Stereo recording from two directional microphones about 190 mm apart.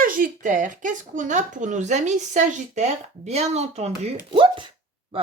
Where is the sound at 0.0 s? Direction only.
45° right (ahead or behind).